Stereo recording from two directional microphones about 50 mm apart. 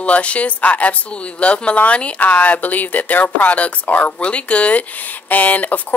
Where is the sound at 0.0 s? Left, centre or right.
Left.